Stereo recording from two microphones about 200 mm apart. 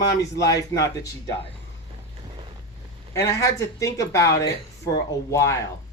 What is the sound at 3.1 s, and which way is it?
Speech, 15° left (ahead or behind).